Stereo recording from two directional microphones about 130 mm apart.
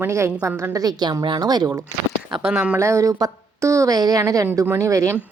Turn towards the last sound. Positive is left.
turn(degrees=-25)  # may be behind; listen again after turning